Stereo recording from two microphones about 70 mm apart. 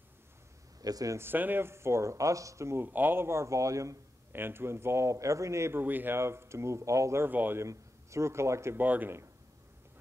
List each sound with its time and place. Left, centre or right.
0.8 s speech: right
1.1 s speech: right
2.8 s speech: right
4.3 s speech: right
5.8 s speech: right
7.2 s speech: right
7.6 s a man's voice: right
8.7 s speech: right